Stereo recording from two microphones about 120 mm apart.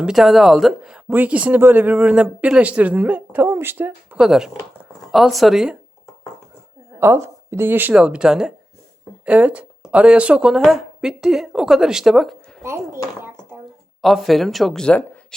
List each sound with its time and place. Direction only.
0.0 s a woman's voice: 5° right (ahead or behind)
7.0 s a woman's voice: 20° right (ahead or behind); by 12.6 s centre (ahead or behind)
12.6 s a child's voice: 20° right (ahead or behind)
14.0 s a woman's voice: centre (ahead or behind)